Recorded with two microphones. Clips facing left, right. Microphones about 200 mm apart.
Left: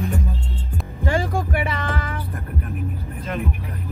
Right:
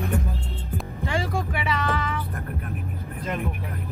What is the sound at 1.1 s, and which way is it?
Music, 50° left (ahead or behind).